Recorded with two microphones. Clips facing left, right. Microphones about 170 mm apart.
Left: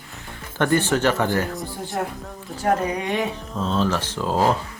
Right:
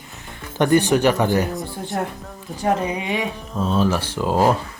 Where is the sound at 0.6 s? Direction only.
15° right (ahead or behind).